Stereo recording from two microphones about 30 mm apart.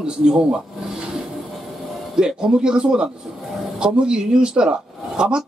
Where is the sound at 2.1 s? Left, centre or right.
Right.